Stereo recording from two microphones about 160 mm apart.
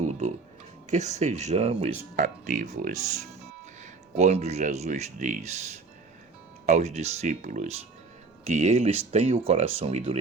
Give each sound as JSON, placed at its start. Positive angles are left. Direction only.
{"t": 0.0, "sound": "a sound", "side_deg": -45}
{"t": 0.9, "sound": "speech", "side_deg": -45}
{"t": 2.1, "sound": "speech", "side_deg": -55}
{"t": 4.1, "sound": "speech", "side_deg": -45}